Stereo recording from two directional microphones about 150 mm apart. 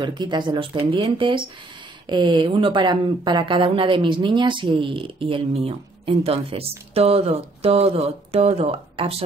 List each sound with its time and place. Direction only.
0.0 s speech: 30° right (ahead or behind)